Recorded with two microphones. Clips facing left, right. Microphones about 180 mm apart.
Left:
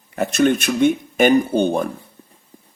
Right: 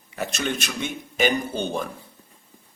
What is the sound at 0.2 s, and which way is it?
A man's voice, 55° left (ahead or behind).